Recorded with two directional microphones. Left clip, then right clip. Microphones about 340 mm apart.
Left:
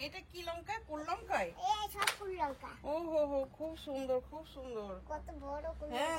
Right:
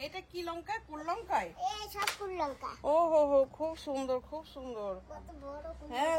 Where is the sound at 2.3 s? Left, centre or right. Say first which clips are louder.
Right 3 dB; centre.